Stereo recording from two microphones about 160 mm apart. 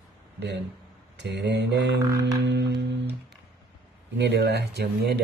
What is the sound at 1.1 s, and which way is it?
Speech, 90° right.